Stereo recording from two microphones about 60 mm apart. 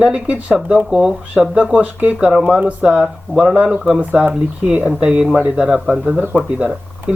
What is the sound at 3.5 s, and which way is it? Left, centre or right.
Speech, centre.